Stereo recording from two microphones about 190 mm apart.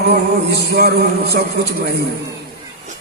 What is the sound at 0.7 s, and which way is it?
Speech, 55° right (ahead or behind).